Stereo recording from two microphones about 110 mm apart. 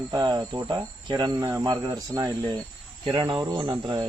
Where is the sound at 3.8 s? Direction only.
40° right (ahead or behind).